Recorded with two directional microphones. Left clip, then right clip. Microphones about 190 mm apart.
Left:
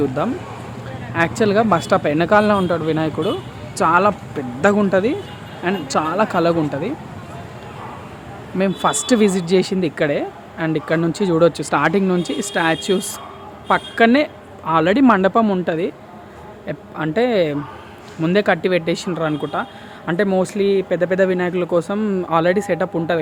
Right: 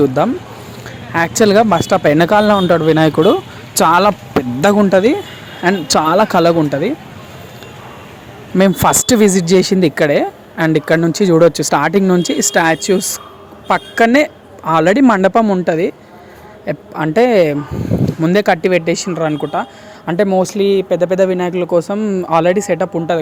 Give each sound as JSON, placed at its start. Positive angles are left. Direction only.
{"t": 0.0, "sound": "speech", "side_deg": -40}
{"t": 4.6, "sound": "speech", "side_deg": -40}
{"t": 8.5, "sound": "speech", "side_deg": -45}